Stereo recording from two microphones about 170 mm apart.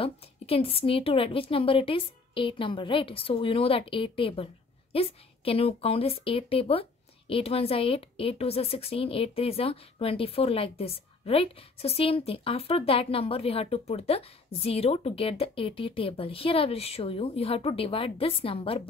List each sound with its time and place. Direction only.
0.0 s speech: 35° left (ahead or behind)